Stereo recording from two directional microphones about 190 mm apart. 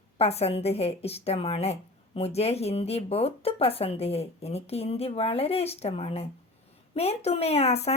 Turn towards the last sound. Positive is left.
turn(degrees=35)  # may be behind; listen again after turning